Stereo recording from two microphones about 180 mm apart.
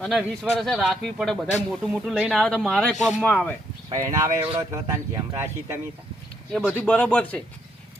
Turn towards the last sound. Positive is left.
turn(degrees=5)  # may be behind; listen again after turning